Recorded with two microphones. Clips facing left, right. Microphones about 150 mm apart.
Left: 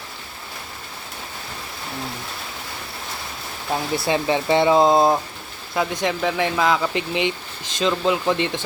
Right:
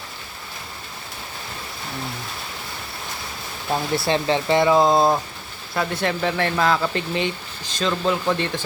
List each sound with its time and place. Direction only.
3.9 s speech: 15° left (ahead or behind)
4.9 s speech: centre (ahead or behind)
5.7 s speech: 15° left (ahead or behind)
6.9 s speech: 15° left (ahead or behind)